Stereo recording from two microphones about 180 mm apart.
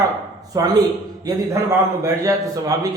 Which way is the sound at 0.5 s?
20° right (ahead or behind).